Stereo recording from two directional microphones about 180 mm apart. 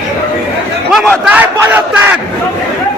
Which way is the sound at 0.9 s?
Centre (ahead or behind).